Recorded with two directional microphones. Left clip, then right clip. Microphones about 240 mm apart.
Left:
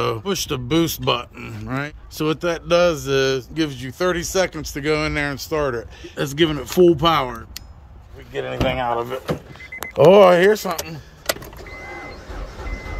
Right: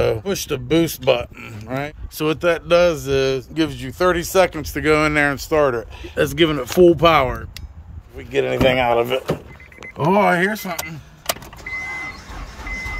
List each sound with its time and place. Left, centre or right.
0.0 s speech: centre
8.3 s speech: right
9.9 s speech: centre